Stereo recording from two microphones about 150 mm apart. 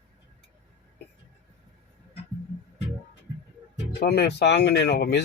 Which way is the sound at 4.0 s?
90° left.